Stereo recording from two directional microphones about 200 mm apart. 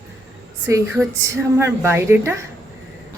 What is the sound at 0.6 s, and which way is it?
A woman's voice, 15° right (ahead or behind).